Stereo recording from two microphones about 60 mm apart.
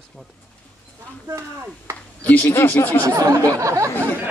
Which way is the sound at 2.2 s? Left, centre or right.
Left.